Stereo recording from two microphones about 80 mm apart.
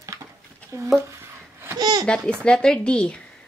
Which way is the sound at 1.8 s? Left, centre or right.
Right.